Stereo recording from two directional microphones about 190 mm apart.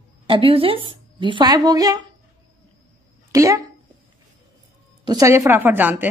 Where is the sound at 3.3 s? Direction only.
15° right (ahead or behind).